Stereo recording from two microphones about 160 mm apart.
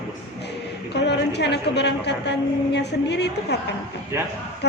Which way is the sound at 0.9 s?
90° left.